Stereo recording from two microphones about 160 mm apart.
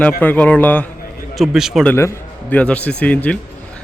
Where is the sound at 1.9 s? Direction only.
15° left (ahead or behind).